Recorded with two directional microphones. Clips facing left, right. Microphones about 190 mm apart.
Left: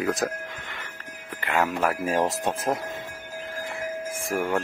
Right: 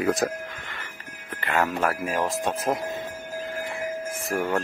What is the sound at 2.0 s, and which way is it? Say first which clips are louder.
Speech: left 2 dB; 30° left (ahead or behind).